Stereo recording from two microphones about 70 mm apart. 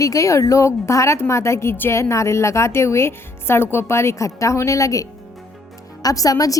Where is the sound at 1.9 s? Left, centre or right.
Left.